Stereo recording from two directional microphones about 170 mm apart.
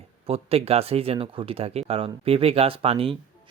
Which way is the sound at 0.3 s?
35° right (ahead or behind).